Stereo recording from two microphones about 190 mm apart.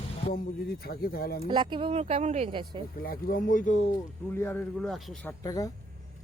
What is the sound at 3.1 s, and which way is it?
Speech, 45° left (ahead or behind).